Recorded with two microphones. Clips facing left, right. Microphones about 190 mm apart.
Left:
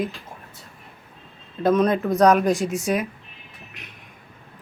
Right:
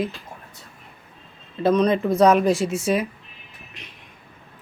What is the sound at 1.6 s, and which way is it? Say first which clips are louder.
Speech: right 1 dB; centre (ahead or behind).